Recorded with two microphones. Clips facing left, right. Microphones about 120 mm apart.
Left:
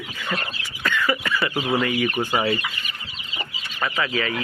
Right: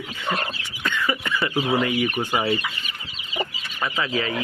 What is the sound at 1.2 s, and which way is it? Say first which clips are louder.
Speech: even; 25° right (ahead or behind).